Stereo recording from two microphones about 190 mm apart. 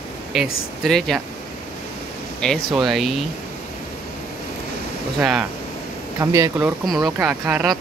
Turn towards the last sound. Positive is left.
turn(degrees=-5)  # may be behind; listen again after turning